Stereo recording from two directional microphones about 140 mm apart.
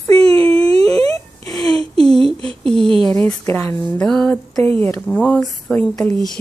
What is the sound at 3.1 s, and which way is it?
Speech, 15° left (ahead or behind).